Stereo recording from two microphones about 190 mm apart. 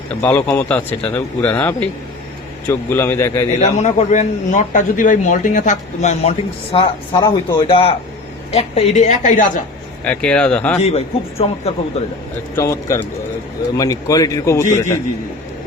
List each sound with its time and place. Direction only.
0.2 s speech: 10° left (ahead or behind)
2.6 s speech: 10° left (ahead or behind)
3.6 s a man's voice: 35° left (ahead or behind)
10.0 s speech: 5° left (ahead or behind)
10.8 s a man's voice: 35° left (ahead or behind)
12.5 s a man's voice: 15° left (ahead or behind)